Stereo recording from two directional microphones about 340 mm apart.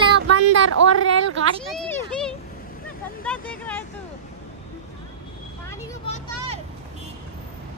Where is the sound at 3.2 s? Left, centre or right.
Centre.